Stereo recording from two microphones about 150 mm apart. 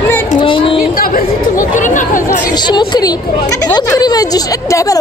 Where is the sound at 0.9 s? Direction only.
70° left (ahead or behind).